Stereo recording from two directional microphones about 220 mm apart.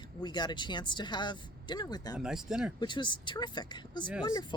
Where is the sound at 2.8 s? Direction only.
20° left (ahead or behind).